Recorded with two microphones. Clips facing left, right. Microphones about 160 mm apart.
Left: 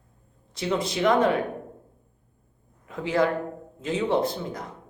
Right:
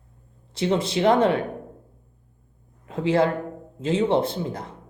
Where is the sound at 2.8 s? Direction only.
30° right (ahead or behind).